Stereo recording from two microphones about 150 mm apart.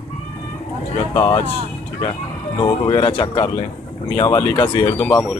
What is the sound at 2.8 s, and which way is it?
Speech, 35° left (ahead or behind).